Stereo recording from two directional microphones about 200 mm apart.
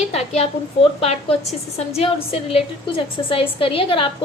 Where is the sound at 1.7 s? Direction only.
30° left (ahead or behind).